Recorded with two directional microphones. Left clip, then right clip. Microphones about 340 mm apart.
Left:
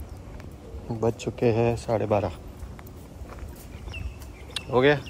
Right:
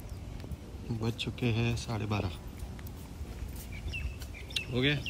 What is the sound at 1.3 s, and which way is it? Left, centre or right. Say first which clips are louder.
Speech: left 14 dB; centre.